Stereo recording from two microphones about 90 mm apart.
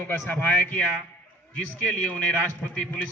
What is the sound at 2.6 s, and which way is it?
Speech, 20° left (ahead or behind).